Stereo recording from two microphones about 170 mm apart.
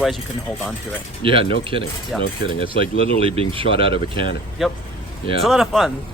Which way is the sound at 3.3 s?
30° right (ahead or behind).